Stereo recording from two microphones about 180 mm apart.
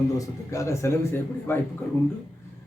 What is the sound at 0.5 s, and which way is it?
A man's voice, 15° left (ahead or behind).